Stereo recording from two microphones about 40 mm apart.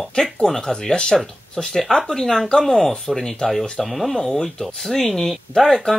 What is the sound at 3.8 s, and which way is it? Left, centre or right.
Speech, centre.